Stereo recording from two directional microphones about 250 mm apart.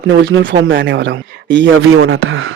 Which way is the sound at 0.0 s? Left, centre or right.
Right.